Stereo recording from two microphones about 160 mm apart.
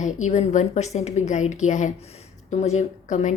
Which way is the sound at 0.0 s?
45° left (ahead or behind).